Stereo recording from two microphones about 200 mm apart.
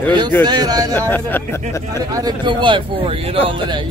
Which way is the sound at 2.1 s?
20° right (ahead or behind).